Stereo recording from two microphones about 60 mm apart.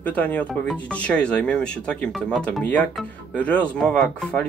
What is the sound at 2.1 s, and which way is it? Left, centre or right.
Speech, centre.